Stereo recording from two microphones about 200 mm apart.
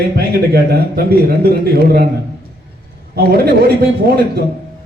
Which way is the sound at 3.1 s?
50° right (ahead or behind).